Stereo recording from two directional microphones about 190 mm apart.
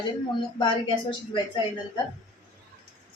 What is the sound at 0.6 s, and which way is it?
Speech, 25° left (ahead or behind).